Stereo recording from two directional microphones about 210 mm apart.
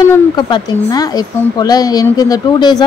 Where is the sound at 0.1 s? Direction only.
20° left (ahead or behind).